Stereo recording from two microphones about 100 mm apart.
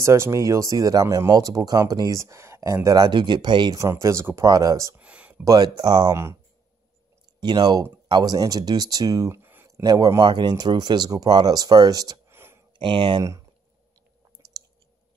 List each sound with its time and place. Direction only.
0.0 s speech: 30° right (ahead or behind)
3.1 s speech: 50° right (ahead or behind)
3.7 s speech: 30° right (ahead or behind)
4.9 s a sound: 15° right (ahead or behind)
5.3 s speech: 40° right (ahead or behind)
7.3 s speech: 45° right (ahead or behind)
9.4 s a sound: 20° right (ahead or behind)
9.8 s speech: 40° right (ahead or behind)
12.3 s a sound: 25° right (ahead or behind)
12.7 s speech: 55° right (ahead or behind)